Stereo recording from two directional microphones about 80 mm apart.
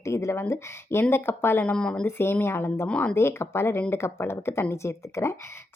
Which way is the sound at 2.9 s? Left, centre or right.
Centre.